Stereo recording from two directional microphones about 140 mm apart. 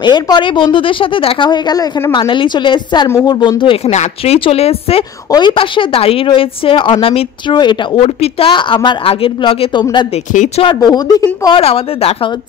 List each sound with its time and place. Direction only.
0.0 s a woman's voice: 35° left (ahead or behind)
10.3 s speech: 60° left (ahead or behind)
10.6 s speech: 30° left (ahead or behind)
11.6 s speech: 45° left (ahead or behind)